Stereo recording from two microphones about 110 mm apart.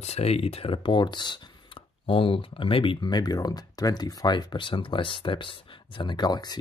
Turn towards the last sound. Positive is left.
turn(degrees=40)  # may be behind; listen again after turning